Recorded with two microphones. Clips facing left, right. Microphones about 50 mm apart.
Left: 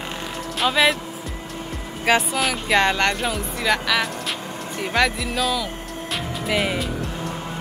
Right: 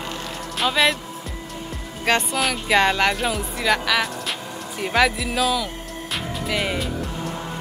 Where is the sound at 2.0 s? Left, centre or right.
Centre.